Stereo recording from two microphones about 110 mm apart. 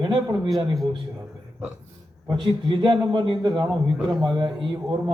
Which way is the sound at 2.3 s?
45° right (ahead or behind).